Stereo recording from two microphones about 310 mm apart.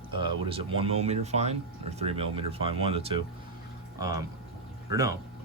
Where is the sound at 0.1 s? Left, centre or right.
Centre.